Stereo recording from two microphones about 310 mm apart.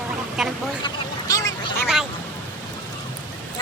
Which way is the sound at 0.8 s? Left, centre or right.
Centre.